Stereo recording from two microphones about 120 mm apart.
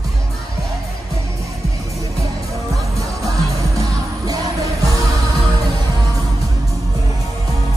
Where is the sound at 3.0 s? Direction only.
30° right (ahead or behind).